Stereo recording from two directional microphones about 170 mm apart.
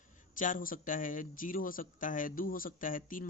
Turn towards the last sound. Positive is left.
turn(degrees=55)  # may be behind; listen again after turning